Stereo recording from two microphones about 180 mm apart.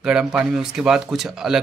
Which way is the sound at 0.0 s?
5° right (ahead or behind).